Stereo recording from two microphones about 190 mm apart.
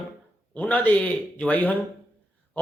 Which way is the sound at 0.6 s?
10° left (ahead or behind).